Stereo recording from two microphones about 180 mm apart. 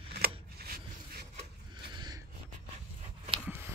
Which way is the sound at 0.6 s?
60° right (ahead or behind).